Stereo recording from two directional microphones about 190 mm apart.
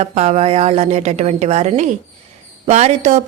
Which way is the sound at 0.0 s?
35° right (ahead or behind).